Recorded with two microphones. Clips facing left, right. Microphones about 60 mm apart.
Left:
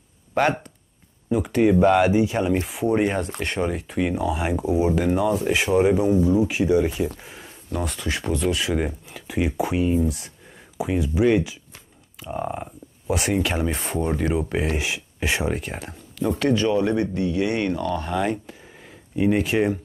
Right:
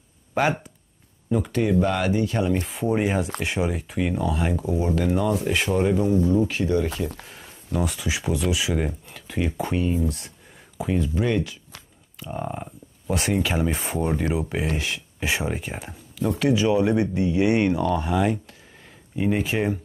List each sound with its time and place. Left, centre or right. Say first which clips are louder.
0.3 s speech: left 2 dB; centre
1.3 s speech: left 3 dB; centre
7.2 s speech: left 1 dB; centre